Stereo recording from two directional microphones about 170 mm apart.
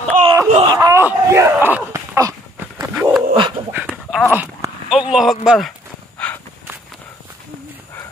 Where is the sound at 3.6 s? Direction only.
30° right (ahead or behind).